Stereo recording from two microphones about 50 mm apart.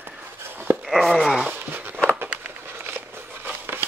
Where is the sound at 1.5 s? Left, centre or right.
Right.